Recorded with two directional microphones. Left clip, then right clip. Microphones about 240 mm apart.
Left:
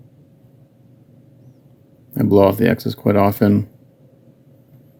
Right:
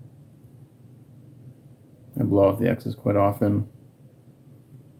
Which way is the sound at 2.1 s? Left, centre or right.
Left.